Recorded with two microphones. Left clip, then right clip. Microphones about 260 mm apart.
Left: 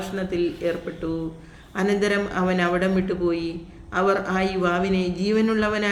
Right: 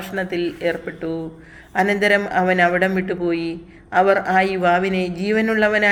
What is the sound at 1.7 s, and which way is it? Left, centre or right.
Speech, centre.